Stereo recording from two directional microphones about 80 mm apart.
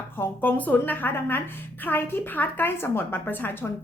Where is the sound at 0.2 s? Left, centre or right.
Left.